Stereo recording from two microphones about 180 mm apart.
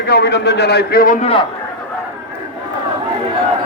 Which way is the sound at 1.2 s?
30° left (ahead or behind).